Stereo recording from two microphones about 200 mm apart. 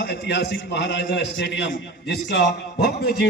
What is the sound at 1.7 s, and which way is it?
A man's voice, 55° left (ahead or behind).